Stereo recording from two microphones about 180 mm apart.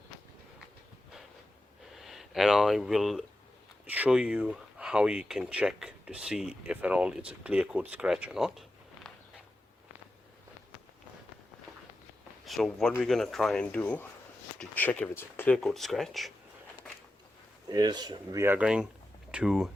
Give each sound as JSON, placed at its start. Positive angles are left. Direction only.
{"t": 1.9, "sound": "speech", "side_deg": 0}
{"t": 12.5, "sound": "speech", "side_deg": 0}
{"t": 17.7, "sound": "speech", "side_deg": -20}